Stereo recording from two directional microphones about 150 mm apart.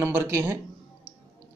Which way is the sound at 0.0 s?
15° right (ahead or behind).